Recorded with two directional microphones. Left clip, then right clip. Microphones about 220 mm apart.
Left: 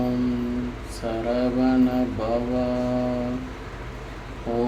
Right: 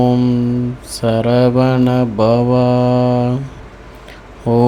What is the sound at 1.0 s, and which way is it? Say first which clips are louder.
Mantra: right 11 dB; 50° right (ahead or behind).